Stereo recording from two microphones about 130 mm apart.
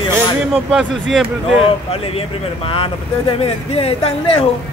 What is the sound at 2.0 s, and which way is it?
Speech, 45° left (ahead or behind).